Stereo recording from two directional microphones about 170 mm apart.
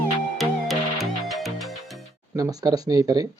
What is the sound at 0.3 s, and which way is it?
Music, centre (ahead or behind).